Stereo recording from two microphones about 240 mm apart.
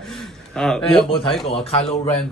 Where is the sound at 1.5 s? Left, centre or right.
Left.